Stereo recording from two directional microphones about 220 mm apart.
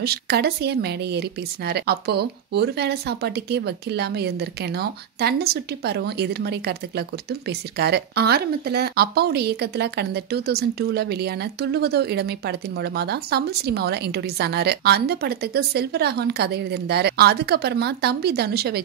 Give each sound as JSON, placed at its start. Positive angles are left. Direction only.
{"t": 0.0, "sound": "speech", "side_deg": -45}